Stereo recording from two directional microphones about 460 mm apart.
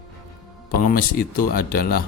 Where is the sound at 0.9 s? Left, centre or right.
Centre.